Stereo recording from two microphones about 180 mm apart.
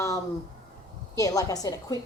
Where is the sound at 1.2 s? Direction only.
20° left (ahead or behind).